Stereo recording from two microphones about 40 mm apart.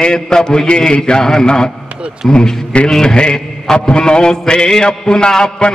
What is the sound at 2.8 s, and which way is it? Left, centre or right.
Mantra, centre.